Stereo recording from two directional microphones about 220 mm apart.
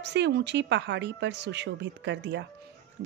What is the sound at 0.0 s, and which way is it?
Speech, 50° right (ahead or behind).